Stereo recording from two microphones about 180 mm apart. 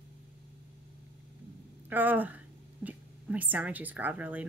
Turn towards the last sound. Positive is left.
turn(degrees=-10)  # may be behind; listen again after turning